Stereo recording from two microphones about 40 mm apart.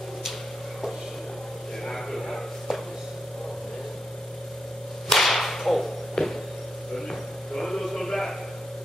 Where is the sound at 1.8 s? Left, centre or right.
Centre.